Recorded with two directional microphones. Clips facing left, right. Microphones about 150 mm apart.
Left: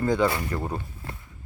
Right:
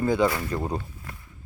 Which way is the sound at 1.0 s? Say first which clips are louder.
Left 3 dB; 30° left (ahead or behind).